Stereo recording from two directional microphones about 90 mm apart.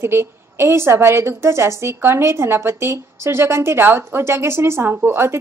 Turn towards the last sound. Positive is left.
turn(degrees=-25)  # may be behind; listen again after turning